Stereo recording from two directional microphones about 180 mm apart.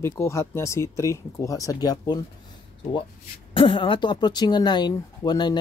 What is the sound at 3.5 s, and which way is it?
Speech, 30° left (ahead or behind).